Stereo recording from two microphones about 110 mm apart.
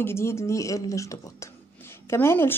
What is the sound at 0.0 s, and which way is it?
Speech, 25° left (ahead or behind).